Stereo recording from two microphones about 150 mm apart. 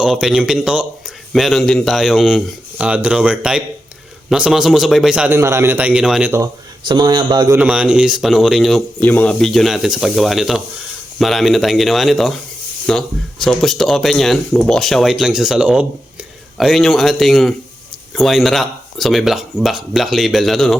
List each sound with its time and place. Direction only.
0.0 s speech: 5° right (ahead or behind)
5.3 s a man's voice: 15° right (ahead or behind)
6.8 s speech: 30° right (ahead or behind)
7.5 s speech: 10° right (ahead or behind)
9.0 s speech: 10° left (ahead or behind)